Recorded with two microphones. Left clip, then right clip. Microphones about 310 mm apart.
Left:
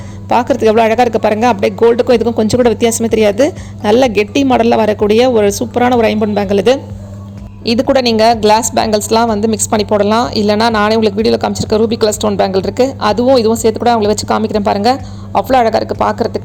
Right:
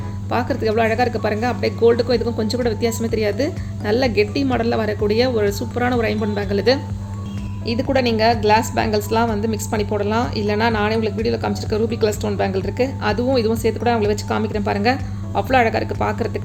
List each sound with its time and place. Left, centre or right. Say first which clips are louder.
0.3 s a woman's voice: left 10 dB; left